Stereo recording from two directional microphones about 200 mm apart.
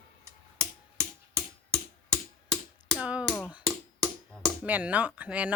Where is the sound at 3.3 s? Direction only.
Centre (ahead or behind).